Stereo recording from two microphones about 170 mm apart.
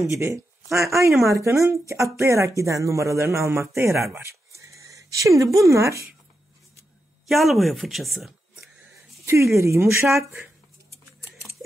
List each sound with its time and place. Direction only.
0.1 s speech: 15° right (ahead or behind)
7.2 s a woman's voice: centre (ahead or behind)
9.2 s a sound: 15° right (ahead or behind)
9.6 s speech: 15° right (ahead or behind)